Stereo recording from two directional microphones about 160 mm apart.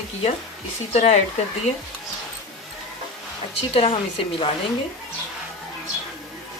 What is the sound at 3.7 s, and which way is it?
Speech, 35° left (ahead or behind).